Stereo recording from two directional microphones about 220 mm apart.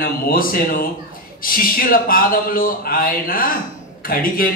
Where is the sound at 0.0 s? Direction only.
40° left (ahead or behind).